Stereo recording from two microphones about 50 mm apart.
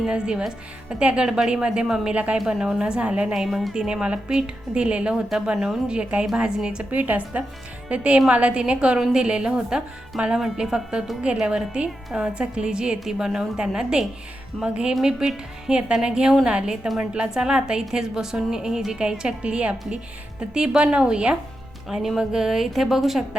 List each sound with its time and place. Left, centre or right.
0.0 s a woman's voice: centre
2.5 s a woman's voice: centre
3.3 s a woman's voice: centre
6.9 s a woman's voice: right; by 11.2 s centre
11.2 s a woman's voice: centre
15.0 s a woman's voice: centre
21.8 s a woman's voice: centre